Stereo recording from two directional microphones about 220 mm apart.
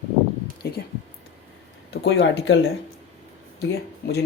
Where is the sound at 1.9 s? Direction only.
55° left (ahead or behind).